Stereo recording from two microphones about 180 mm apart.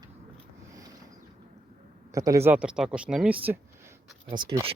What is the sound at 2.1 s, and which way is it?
Speech, 15° right (ahead or behind).